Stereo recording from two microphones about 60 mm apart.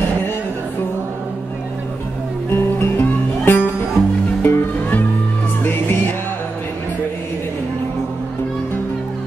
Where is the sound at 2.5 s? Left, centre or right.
Left.